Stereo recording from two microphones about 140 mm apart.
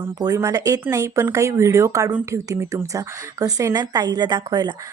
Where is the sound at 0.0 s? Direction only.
20° right (ahead or behind).